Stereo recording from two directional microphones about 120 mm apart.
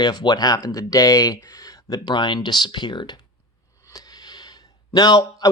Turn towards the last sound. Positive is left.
turn(degrees=35)  # may be behind; listen again after turning